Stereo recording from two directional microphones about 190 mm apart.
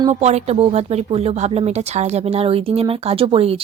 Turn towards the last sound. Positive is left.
turn(degrees=-30)  # may be behind; listen again after turning